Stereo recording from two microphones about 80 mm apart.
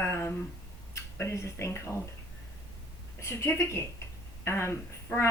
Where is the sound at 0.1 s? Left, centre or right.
Left.